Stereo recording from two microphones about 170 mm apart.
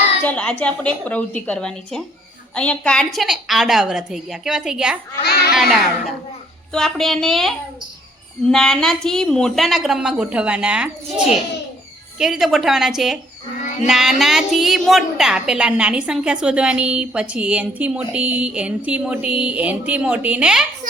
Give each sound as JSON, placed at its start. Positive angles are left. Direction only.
{"t": 0.2, "sound": "a woman's voice", "side_deg": 10}
{"t": 5.2, "sound": "a sound", "side_deg": 70}
{"t": 5.5, "sound": "a woman's voice", "side_deg": 0}
{"t": 12.2, "sound": "a woman's voice", "side_deg": 0}